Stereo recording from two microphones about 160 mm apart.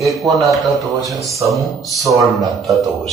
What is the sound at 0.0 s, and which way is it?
Speech, centre (ahead or behind).